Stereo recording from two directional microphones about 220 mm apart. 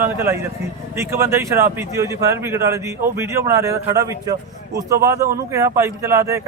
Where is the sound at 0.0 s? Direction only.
10° right (ahead or behind).